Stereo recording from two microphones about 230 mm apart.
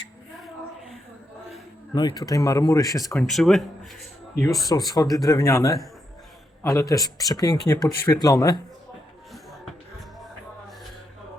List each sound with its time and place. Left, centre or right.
2.0 s speech: centre
3.2 s speech: centre
4.6 s speech: centre